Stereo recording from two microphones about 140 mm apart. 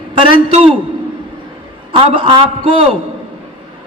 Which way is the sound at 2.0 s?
40° right (ahead or behind).